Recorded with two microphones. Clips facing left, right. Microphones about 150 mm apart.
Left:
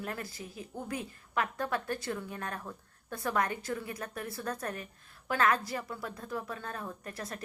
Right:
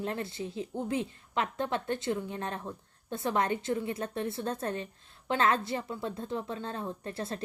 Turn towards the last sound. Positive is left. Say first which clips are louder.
# right 5 dB
turn(degrees=-30)  # may be behind; listen again after turning